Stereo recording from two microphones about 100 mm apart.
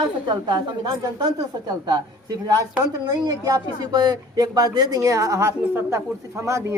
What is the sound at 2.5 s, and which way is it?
Speech, 35° right (ahead or behind).